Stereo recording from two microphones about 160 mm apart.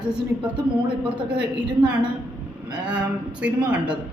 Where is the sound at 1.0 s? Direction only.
10° right (ahead or behind).